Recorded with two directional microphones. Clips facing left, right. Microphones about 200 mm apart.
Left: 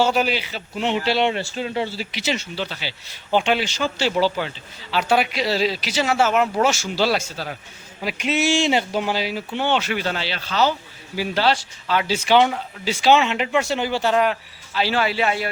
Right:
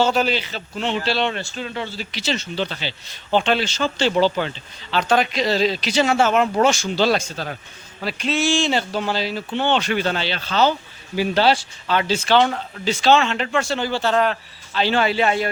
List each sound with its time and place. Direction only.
0.0 s speech: 10° left (ahead or behind)
10.5 s speech: 25° right (ahead or behind)
11.9 s speech: 10° left (ahead or behind)